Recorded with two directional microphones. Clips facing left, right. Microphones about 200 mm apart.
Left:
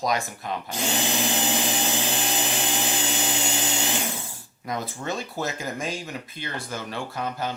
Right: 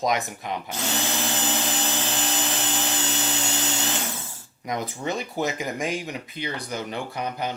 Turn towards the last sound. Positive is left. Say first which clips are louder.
# even
turn(degrees=-15)  # may be behind; listen again after turning